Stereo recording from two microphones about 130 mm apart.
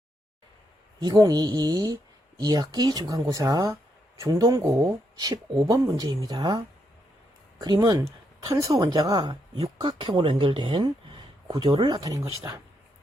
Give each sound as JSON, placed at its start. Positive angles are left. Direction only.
{"t": 1.0, "sound": "speech", "side_deg": -30}
{"t": 7.6, "sound": "speech", "side_deg": -30}